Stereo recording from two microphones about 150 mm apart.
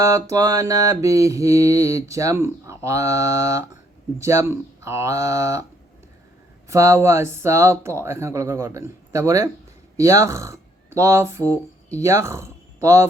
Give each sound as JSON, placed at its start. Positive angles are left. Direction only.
{"t": 0.0, "sound": "mantra", "side_deg": -20}
{"t": 6.7, "sound": "mantra", "side_deg": -20}
{"t": 10.0, "sound": "speech", "side_deg": -20}